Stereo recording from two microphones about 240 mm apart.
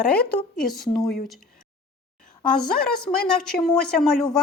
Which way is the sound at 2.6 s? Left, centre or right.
Centre.